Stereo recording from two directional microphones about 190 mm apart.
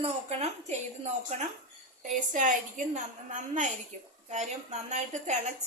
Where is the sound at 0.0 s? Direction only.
35° right (ahead or behind).